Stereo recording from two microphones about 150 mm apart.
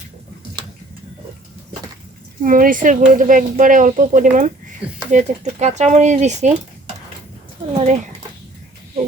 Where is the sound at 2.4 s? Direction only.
65° right (ahead or behind).